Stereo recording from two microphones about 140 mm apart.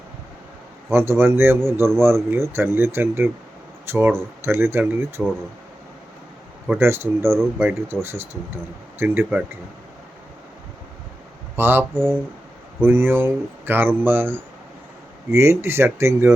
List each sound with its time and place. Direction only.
0.9 s speech: 20° right (ahead or behind)
6.7 s speech: 15° right (ahead or behind)
11.5 s speech: 15° right (ahead or behind)